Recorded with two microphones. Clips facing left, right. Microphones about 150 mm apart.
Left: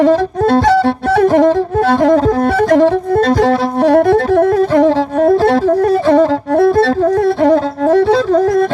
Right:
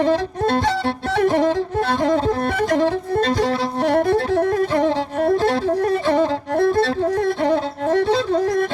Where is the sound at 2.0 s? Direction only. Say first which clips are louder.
Left 7 dB; 60° left (ahead or behind).